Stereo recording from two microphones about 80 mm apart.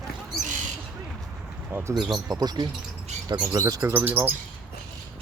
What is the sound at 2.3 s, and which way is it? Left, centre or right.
Speech, right.